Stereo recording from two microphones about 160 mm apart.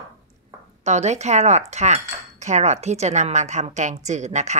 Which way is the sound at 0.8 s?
45° right (ahead or behind).